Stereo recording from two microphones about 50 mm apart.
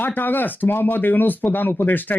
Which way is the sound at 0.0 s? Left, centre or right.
Left.